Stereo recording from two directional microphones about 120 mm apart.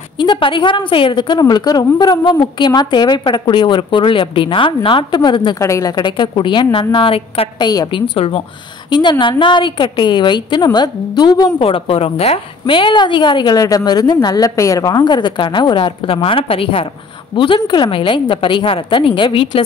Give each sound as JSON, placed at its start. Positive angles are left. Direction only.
{"t": 0.2, "sound": "a woman's voice", "side_deg": 40}
{"t": 5.6, "sound": "a woman's voice", "side_deg": 25}
{"t": 7.6, "sound": "a woman's voice", "side_deg": 35}
{"t": 11.6, "sound": "a woman's voice", "side_deg": 55}